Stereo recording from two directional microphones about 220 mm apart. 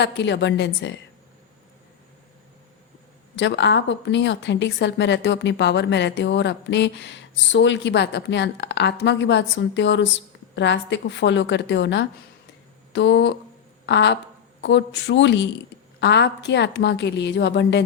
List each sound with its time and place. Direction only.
0.0 s a woman's voice: 50° left (ahead or behind)
3.3 s a woman's voice: 55° left (ahead or behind)